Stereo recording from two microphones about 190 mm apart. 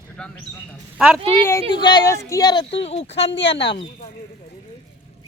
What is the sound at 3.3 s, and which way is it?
Speech, 65° left (ahead or behind).